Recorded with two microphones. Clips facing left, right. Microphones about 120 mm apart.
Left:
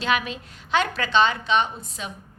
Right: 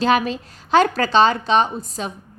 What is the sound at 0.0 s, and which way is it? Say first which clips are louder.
A woman's voice: right 7 dB; 35° right (ahead or behind).